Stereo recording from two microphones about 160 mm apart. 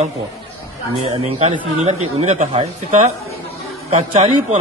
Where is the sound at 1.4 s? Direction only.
45° right (ahead or behind).